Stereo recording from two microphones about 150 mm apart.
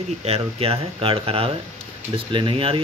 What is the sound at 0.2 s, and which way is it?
Speech, 40° right (ahead or behind).